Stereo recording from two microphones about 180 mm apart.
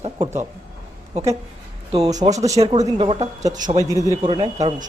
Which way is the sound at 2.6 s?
30° right (ahead or behind).